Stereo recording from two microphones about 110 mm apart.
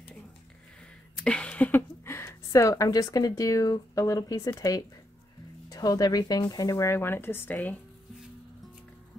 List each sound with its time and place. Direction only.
1.1 s speech: 10° left (ahead or behind)